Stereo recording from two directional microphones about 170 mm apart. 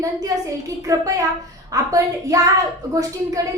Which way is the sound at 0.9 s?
20° right (ahead or behind).